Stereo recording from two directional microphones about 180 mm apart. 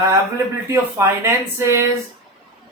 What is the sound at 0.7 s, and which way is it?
Speech, 15° right (ahead or behind).